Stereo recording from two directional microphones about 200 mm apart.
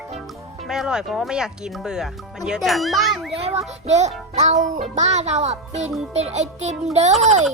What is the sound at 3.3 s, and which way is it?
Child singing, 30° right (ahead or behind).